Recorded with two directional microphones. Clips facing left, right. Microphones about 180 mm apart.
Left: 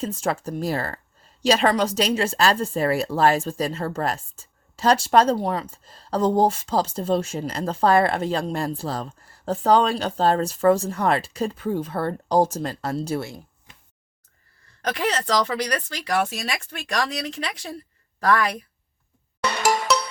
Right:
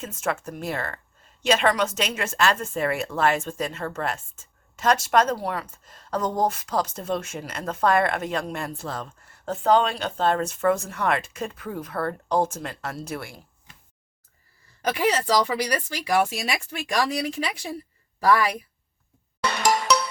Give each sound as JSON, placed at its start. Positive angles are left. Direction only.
{"t": 0.0, "sound": "speech", "side_deg": 30}
{"t": 14.8, "sound": "speech", "side_deg": -10}
{"t": 19.9, "sound": "music", "side_deg": 0}